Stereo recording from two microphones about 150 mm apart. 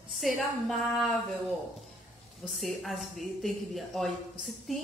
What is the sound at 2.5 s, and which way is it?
A woman's voice, centre (ahead or behind).